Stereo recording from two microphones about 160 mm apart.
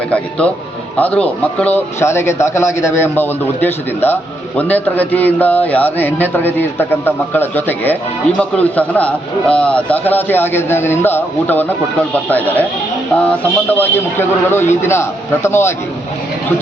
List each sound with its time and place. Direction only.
0.1 s a man's voice: 5° left (ahead or behind)
13.7 s a man's voice: 15° left (ahead or behind)